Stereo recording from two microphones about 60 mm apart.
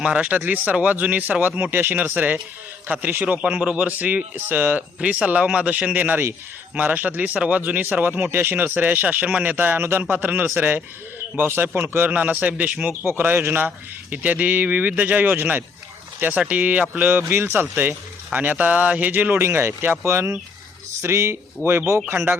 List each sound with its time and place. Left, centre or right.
0.0 s speech: right
3.3 s speech: centre
4.9 s speech: right
13.1 s speech: right
13.7 s speech: right
17.1 s speech: right
18.3 s speech: right
20.1 s speech: right